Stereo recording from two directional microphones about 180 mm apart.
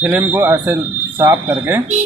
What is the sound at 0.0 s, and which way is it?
Speech, 10° right (ahead or behind).